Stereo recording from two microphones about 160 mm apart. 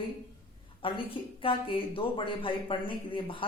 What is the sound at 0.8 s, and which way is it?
Speech, 35° left (ahead or behind).